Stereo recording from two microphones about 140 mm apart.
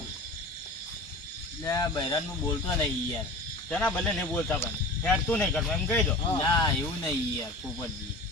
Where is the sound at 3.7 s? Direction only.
5° left (ahead or behind).